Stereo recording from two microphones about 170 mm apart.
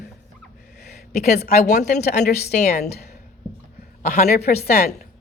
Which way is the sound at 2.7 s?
70° left (ahead or behind).